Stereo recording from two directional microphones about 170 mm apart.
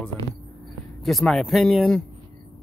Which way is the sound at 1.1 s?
Centre (ahead or behind).